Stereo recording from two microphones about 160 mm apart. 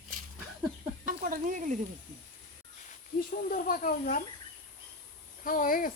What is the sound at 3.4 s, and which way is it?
Speech, 60° left (ahead or behind).